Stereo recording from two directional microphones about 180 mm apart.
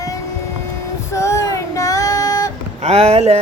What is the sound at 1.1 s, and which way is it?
Female singing, 15° left (ahead or behind).